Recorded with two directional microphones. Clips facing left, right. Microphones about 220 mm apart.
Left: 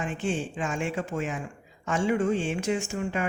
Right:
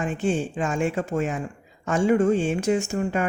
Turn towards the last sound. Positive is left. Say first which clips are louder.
# right 5 dB
turn(degrees=-45)  # may be behind; listen again after turning